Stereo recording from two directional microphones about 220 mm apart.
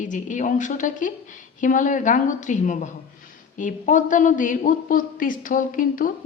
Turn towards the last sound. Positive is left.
turn(degrees=40)  # may be behind; listen again after turning